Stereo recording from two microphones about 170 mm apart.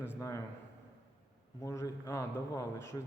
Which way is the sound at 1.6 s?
20° left (ahead or behind).